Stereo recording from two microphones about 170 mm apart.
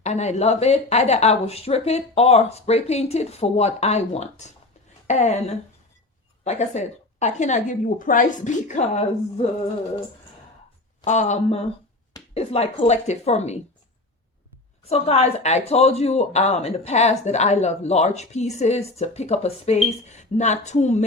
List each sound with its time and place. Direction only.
0.0 s a woman's voice: 40° left (ahead or behind)
11.0 s a woman's voice: 45° left (ahead or behind)
14.8 s speech: 35° left (ahead or behind)